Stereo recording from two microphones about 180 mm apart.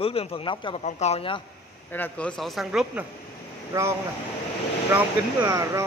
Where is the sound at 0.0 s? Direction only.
35° left (ahead or behind).